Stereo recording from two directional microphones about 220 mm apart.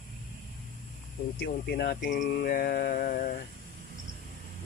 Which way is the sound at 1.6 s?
50° left (ahead or behind).